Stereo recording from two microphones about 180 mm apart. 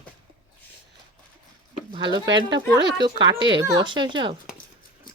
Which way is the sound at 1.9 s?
25° right (ahead or behind).